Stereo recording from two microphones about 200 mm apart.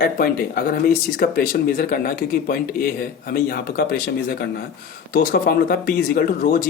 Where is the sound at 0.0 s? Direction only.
50° left (ahead or behind).